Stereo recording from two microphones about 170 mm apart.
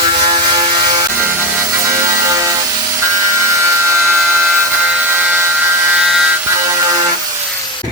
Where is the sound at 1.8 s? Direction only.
20° right (ahead or behind).